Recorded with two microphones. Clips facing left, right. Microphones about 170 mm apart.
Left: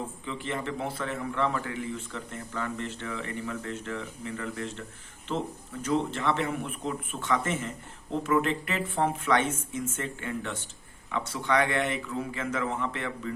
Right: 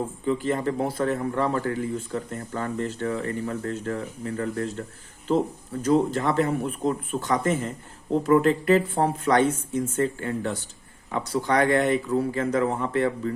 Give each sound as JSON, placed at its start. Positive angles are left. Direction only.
{"t": 0.3, "sound": "speech", "side_deg": -40}
{"t": 5.8, "sound": "speech", "side_deg": -40}